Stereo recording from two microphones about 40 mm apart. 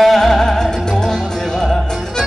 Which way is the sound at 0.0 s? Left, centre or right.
Centre.